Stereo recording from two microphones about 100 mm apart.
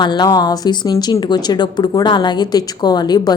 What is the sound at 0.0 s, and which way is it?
A woman's voice, 45° left (ahead or behind).